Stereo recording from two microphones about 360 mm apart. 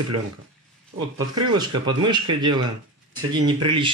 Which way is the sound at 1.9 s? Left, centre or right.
Centre.